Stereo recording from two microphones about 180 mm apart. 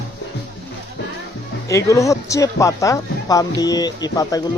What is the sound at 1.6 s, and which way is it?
Speech, 15° left (ahead or behind).